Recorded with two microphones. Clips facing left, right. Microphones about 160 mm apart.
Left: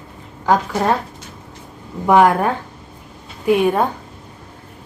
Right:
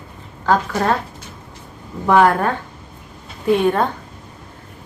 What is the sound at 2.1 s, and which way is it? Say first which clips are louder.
A woman's voice: left 1 dB; 10° left (ahead or behind).